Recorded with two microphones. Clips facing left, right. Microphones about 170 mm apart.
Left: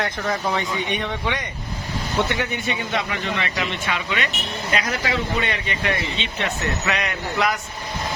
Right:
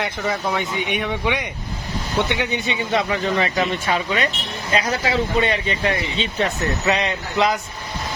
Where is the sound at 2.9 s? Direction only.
35° right (ahead or behind).